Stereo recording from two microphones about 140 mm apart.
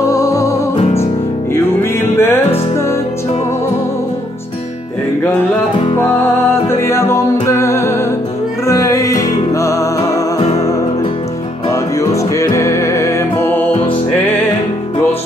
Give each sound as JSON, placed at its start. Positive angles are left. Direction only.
{"t": 0.0, "sound": "music", "side_deg": 25}
{"t": 1.5, "sound": "music", "side_deg": 15}
{"t": 6.7, "sound": "music", "side_deg": 20}
{"t": 11.7, "sound": "music", "side_deg": 20}